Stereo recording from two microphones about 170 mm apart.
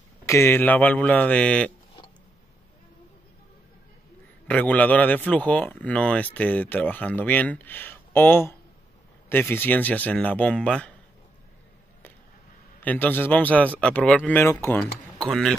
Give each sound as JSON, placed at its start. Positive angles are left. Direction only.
{"t": 0.3, "sound": "speech", "side_deg": 15}
{"t": 4.5, "sound": "speech", "side_deg": 10}
{"t": 12.8, "sound": "speech", "side_deg": 10}
{"t": 15.1, "sound": "speech", "side_deg": 0}